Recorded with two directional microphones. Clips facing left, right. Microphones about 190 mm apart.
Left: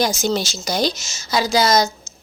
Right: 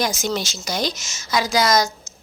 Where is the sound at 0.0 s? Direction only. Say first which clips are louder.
Left 3 dB; 30° left (ahead or behind).